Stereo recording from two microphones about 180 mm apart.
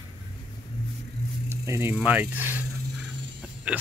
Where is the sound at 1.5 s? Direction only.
15° right (ahead or behind).